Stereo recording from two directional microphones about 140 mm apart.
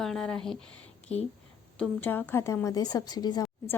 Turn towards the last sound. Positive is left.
turn(degrees=30)  # may be behind; listen again after turning